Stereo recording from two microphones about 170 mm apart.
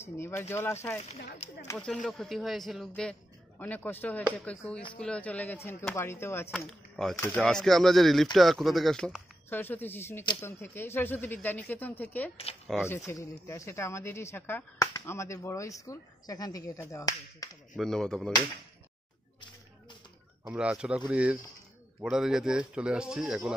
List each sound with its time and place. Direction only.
0.0 s speech: 15° left (ahead or behind)
1.8 s speech: 5° left (ahead or behind)
6.5 s speech: centre (ahead or behind); by 17.5 s 20° left (ahead or behind)
17.7 s speech: 5° left (ahead or behind)
20.4 s speech: 5° right (ahead or behind)